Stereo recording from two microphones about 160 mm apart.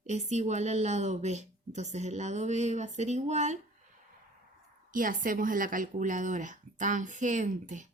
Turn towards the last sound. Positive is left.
turn(degrees=-50)  # may be behind; listen again after turning